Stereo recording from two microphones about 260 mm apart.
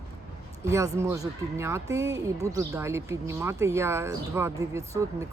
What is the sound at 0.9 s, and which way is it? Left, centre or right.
Speech, centre.